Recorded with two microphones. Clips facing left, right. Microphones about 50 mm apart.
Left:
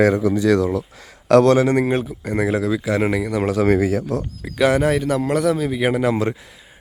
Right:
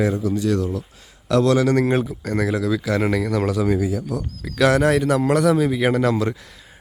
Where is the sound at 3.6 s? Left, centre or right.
Left.